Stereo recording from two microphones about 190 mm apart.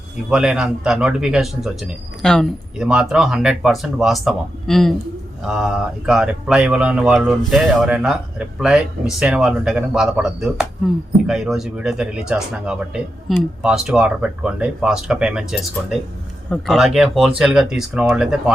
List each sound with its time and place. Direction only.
0.3 s speech: 5° right (ahead or behind)